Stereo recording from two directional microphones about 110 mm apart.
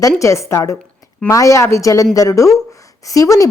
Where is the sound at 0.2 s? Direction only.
25° left (ahead or behind).